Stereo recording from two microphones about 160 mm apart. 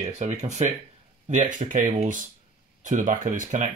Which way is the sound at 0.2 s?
45° right (ahead or behind).